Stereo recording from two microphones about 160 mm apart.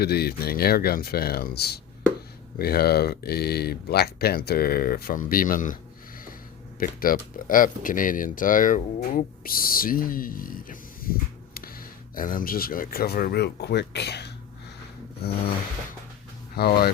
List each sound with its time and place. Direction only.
0.0 s speech: 80° left; by 5.7 s 55° left (ahead or behind)
6.7 s speech: 65° left (ahead or behind); by 14.3 s 90° left
16.6 s speech: 80° left